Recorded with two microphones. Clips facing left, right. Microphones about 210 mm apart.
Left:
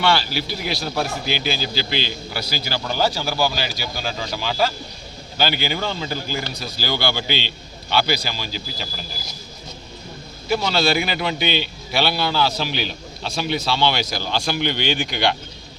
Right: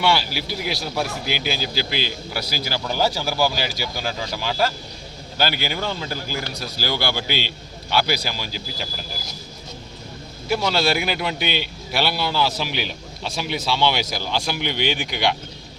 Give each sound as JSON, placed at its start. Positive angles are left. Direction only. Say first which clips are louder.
{"t": 0.0, "sound": "speech", "louder": "left 1 dB", "side_deg": -10}
{"t": 10.5, "sound": "speech", "louder": "left 1 dB", "side_deg": -10}